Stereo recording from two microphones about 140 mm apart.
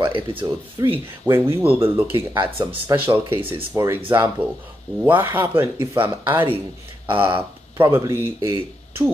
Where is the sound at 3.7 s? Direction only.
15° right (ahead or behind).